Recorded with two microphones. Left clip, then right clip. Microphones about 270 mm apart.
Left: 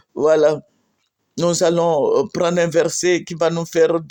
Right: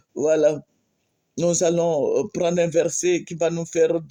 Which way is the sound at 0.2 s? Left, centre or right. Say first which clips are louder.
Left 4 dB; centre.